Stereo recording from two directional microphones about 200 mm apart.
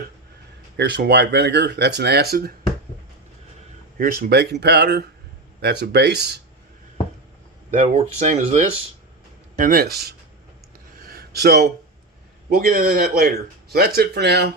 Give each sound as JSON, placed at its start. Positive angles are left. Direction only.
{"t": 0.8, "sound": "speech", "side_deg": -55}
{"t": 3.9, "sound": "speech", "side_deg": -45}
{"t": 7.7, "sound": "speech", "side_deg": -35}
{"t": 9.6, "sound": "speech", "side_deg": -45}
{"t": 11.1, "sound": "a sound", "side_deg": -55}
{"t": 12.5, "sound": "speech", "side_deg": -50}